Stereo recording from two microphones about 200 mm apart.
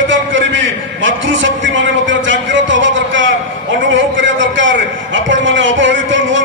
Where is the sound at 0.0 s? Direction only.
65° right (ahead or behind).